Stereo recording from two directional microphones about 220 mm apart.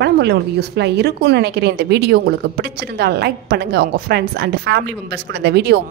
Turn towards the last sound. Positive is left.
turn(degrees=-50)  # may be behind; listen again after turning